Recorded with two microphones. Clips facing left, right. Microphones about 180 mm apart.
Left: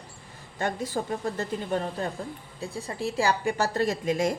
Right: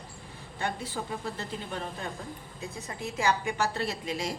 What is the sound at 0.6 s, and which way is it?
A woman's voice, 45° left (ahead or behind).